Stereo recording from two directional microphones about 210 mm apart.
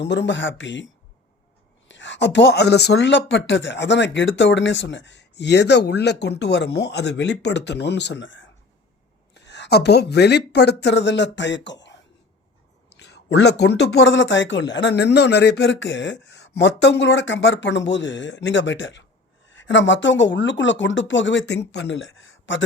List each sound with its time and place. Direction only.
0.0 s speech: 55° left (ahead or behind)
1.9 s speech: 60° left (ahead or behind)
13.0 s a sound: 55° left (ahead or behind)
13.3 s speech: 55° left (ahead or behind)